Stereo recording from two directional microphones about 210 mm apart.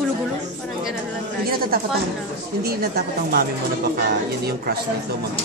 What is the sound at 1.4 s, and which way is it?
Speech, 45° right (ahead or behind).